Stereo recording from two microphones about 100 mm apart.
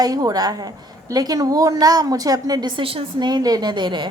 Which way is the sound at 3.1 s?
45° right (ahead or behind).